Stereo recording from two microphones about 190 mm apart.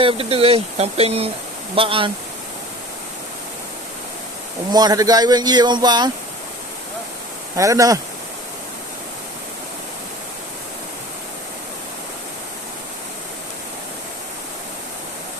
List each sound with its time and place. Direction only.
0.0 s speech: 30° right (ahead or behind)
4.7 s speech: 20° right (ahead or behind)
7.5 s speech: 15° right (ahead or behind)